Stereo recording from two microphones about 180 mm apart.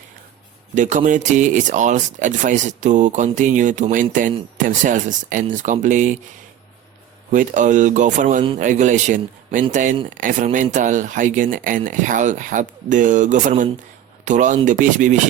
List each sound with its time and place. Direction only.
0.8 s speech: 45° right (ahead or behind)
7.3 s speech: 45° right (ahead or behind)